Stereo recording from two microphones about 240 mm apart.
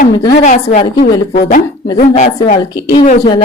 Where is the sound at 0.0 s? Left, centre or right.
Left.